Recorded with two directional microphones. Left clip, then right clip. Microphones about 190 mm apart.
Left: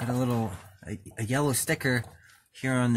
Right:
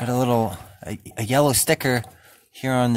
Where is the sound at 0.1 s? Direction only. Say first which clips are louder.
Right 10 dB; 50° right (ahead or behind).